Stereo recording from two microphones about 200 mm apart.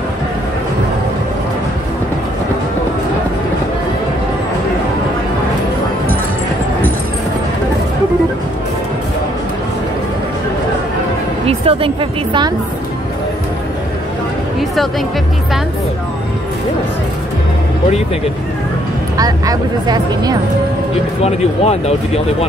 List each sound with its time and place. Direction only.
11.4 s music: 25° right (ahead or behind)
19.1 s speech: 20° right (ahead or behind)
21.2 s speech: 30° left (ahead or behind)